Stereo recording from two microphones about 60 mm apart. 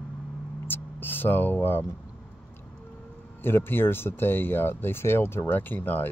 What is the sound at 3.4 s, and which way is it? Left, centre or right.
Speech, left.